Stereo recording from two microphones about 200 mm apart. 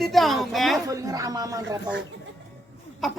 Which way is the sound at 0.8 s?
15° right (ahead or behind).